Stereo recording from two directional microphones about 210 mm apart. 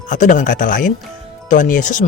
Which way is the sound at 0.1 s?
35° left (ahead or behind).